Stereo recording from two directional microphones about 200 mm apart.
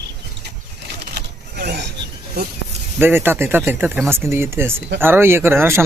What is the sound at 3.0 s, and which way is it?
Speech, 10° right (ahead or behind).